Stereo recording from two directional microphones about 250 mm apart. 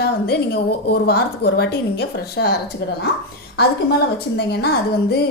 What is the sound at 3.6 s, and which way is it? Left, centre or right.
A woman's voice, left.